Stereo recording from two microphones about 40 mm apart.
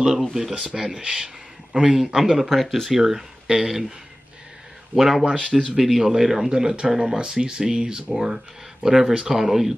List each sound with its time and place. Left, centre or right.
0.3 s speech: centre
0.7 s speech: centre
3.0 s speech: centre
4.9 s speech: centre
5.2 s speech: right
5.8 s speech: centre
7.2 s speech: centre